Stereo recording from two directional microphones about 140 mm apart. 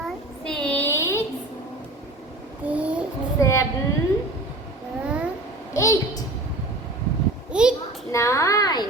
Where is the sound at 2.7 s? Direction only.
10° right (ahead or behind).